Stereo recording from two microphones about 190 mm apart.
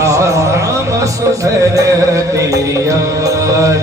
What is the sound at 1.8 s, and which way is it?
Music, 15° right (ahead or behind).